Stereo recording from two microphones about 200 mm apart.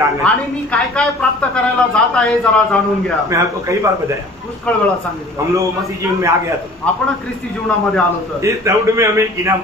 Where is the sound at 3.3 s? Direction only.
15° right (ahead or behind).